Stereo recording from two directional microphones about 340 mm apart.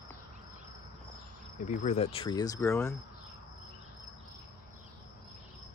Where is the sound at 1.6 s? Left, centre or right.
Left.